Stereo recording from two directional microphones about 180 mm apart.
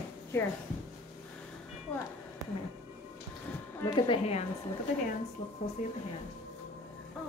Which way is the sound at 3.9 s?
30° left (ahead or behind).